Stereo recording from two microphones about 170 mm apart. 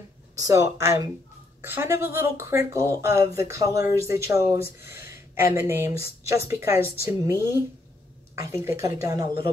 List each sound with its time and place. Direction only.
0.4 s speech: 20° right (ahead or behind)